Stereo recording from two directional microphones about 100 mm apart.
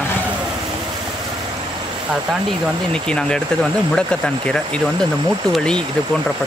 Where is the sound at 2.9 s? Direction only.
10° left (ahead or behind).